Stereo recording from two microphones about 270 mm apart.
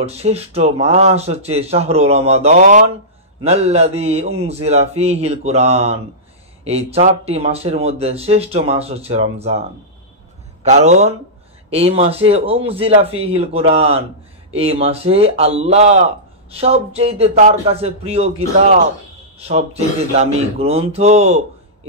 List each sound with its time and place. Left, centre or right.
0.0 s speech: right
10.6 s speech: right